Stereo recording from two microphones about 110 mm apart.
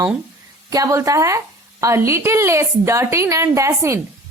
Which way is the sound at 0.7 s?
30° right (ahead or behind).